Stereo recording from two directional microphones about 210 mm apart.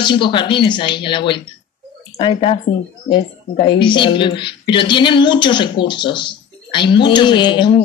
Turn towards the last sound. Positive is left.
turn(degrees=20)  # may be behind; listen again after turning